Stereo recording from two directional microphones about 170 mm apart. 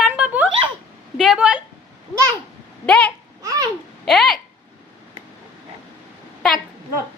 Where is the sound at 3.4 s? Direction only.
20° right (ahead or behind).